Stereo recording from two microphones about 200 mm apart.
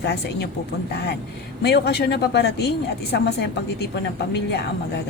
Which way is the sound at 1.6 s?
55° left (ahead or behind).